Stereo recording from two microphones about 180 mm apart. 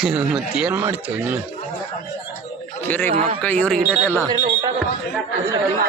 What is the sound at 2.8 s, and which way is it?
A man's voice, 10° left (ahead or behind).